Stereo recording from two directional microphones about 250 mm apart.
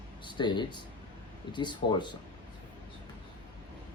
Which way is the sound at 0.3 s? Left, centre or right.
Centre.